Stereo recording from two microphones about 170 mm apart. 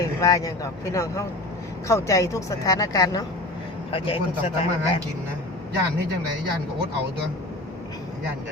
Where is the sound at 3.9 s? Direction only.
35° left (ahead or behind).